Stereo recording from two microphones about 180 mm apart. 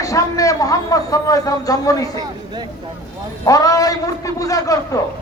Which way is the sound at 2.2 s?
25° right (ahead or behind).